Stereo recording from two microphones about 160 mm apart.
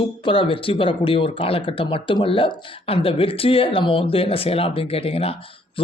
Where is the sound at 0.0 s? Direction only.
30° left (ahead or behind).